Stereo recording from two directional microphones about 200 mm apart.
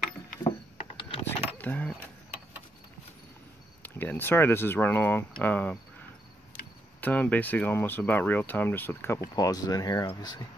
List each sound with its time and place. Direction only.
0.4 s a sound: 25° left (ahead or behind)
1.6 s speech: 10° left (ahead or behind)
3.8 s speech: 10° left (ahead or behind)
7.0 s speech: 10° left (ahead or behind)